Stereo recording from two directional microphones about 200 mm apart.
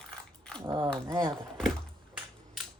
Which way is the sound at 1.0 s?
20° right (ahead or behind).